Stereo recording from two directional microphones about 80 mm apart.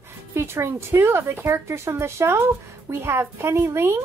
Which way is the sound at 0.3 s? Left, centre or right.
Right.